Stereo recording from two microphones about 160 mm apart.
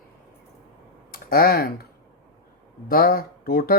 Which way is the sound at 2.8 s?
65° left (ahead or behind).